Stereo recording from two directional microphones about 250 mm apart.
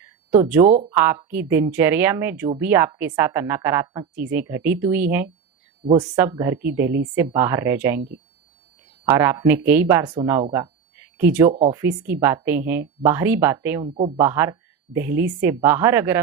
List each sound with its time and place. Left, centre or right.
0.0 s a sound: centre
0.9 s a woman's voice: centre
9.0 s a woman's voice: centre
10.5 s a sound: centre
11.5 s speech: centre
11.8 s a woman's voice: centre
13.8 s speech: right
14.2 s a woman's voice: centre